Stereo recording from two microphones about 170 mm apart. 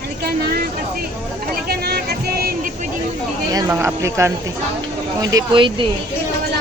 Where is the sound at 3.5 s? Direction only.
20° right (ahead or behind).